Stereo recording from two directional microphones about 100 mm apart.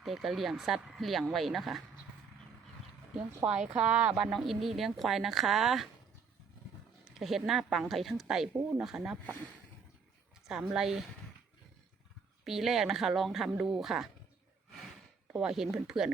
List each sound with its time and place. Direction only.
0.0 s speech: centre (ahead or behind)
3.4 s speech: 10° right (ahead or behind)
7.2 s speech: centre (ahead or behind)
10.4 s speech: 5° right (ahead or behind)
12.5 s speech: 5° right (ahead or behind)
15.3 s speech: 5° right (ahead or behind)